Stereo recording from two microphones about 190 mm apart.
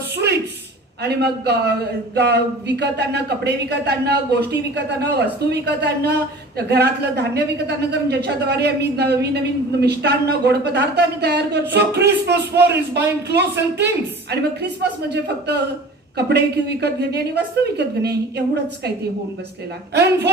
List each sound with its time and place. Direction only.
1.0 s a man's voice: 60° right (ahead or behind)
19.9 s a man's voice: 60° right (ahead or behind)